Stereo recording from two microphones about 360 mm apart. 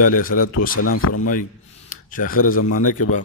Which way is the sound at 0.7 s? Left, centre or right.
Left.